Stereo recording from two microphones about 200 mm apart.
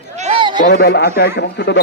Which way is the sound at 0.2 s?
30° right (ahead or behind).